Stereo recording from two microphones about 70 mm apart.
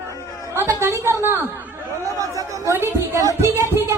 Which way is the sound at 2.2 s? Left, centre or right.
Right.